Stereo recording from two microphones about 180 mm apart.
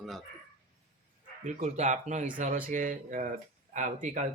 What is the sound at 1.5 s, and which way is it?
Speech, 40° right (ahead or behind).